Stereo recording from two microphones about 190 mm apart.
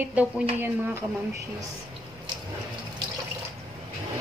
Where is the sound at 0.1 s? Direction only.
10° right (ahead or behind).